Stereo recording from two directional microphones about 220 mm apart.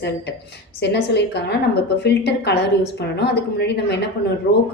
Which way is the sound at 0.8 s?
50° left (ahead or behind).